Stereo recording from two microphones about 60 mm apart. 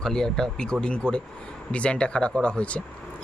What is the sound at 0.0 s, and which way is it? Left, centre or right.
Speech, centre.